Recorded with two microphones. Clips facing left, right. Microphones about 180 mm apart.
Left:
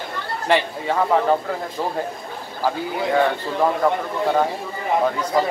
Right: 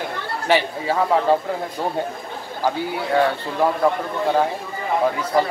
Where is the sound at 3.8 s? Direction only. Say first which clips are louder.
Even; 5° right (ahead or behind).